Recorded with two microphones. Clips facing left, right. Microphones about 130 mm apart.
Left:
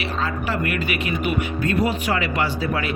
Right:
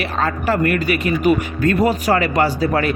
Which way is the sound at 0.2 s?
45° right (ahead or behind).